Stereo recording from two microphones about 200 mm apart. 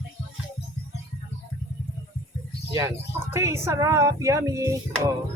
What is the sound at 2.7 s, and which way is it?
Speech, 15° right (ahead or behind).